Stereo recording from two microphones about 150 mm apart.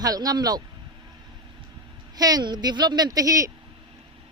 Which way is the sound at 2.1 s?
25° right (ahead or behind).